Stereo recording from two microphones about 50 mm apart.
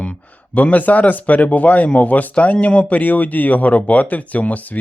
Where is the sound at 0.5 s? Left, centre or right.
Left.